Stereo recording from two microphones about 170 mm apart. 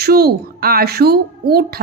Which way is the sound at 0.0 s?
65° right (ahead or behind).